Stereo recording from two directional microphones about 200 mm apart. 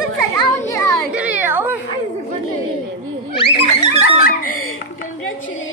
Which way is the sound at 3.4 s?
30° left (ahead or behind).